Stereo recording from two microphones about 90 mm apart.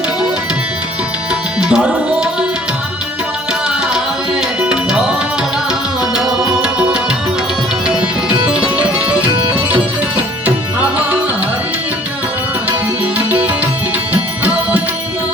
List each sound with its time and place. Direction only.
1.6 s tabla: 10° right (ahead or behind)
3.9 s tabla: 10° right (ahead or behind)
6.0 s music: 5° right (ahead or behind)
9.3 s music: 70° right (ahead or behind)
13.1 s music: 20° right (ahead or behind)